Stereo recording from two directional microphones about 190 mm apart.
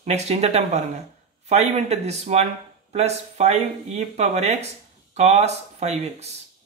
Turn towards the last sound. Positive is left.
turn(degrees=-35)  # may be behind; listen again after turning